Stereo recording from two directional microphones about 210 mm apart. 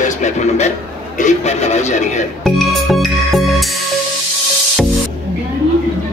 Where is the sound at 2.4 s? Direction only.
Centre (ahead or behind).